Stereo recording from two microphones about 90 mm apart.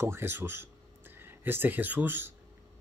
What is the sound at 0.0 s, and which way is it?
Speech, 30° right (ahead or behind).